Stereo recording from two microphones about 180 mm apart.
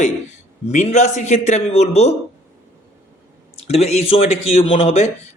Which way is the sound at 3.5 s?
35° left (ahead or behind).